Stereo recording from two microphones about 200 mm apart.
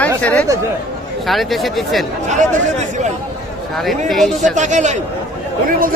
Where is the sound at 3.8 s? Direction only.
Centre (ahead or behind).